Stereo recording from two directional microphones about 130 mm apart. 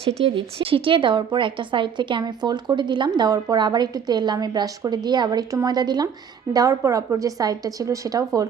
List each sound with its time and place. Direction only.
0.0 s a woman's voice: 50° right (ahead or behind); by 8.4 s 25° right (ahead or behind)